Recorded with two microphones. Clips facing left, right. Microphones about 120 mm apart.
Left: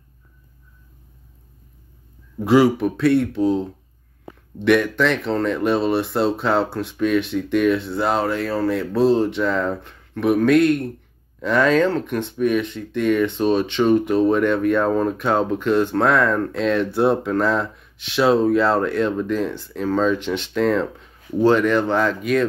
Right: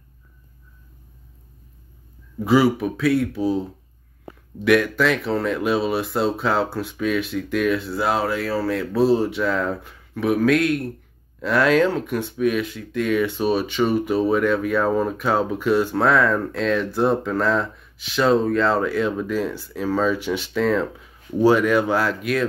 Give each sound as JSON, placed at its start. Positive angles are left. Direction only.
{"t": 2.4, "sound": "speech", "side_deg": 0}
{"t": 4.6, "sound": "speech", "side_deg": -5}